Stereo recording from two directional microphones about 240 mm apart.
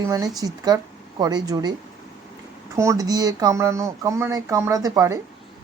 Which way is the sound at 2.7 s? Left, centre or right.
Centre.